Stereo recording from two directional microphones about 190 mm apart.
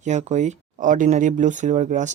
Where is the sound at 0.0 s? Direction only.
40° right (ahead or behind).